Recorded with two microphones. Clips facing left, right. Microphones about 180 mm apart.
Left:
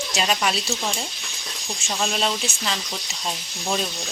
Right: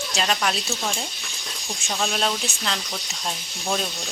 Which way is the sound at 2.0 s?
Centre (ahead or behind).